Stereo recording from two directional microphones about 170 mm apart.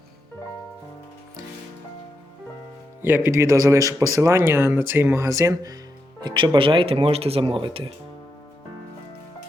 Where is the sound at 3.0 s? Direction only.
10° right (ahead or behind); by 7.9 s 30° right (ahead or behind).